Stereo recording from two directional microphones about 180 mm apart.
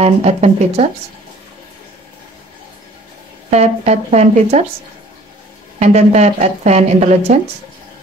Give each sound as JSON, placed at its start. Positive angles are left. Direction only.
{"t": 0.0, "sound": "a woman's voice", "side_deg": -35}
{"t": 3.4, "sound": "a woman's voice", "side_deg": -40}
{"t": 5.8, "sound": "a woman's voice", "side_deg": -35}